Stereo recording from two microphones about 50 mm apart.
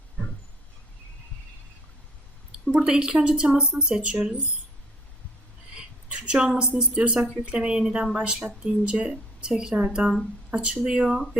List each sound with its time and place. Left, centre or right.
2.5 s speech: centre
5.7 s a sound: right
6.6 s speech: right